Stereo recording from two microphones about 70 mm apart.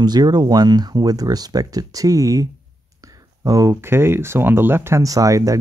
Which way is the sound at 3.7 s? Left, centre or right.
Right.